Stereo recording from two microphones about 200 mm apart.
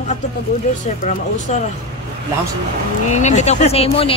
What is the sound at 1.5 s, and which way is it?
Speech, 35° left (ahead or behind).